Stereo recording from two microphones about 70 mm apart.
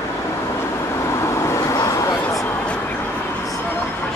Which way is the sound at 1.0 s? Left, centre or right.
Left.